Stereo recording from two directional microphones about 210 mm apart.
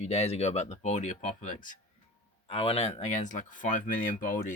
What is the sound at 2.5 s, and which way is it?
Speech, 25° left (ahead or behind).